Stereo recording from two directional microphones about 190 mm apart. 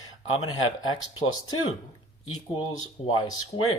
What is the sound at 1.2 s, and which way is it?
Speech, 90° left.